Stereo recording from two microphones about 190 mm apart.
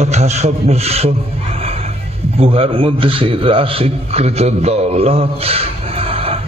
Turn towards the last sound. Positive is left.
turn(degrees=-30)  # may be behind; listen again after turning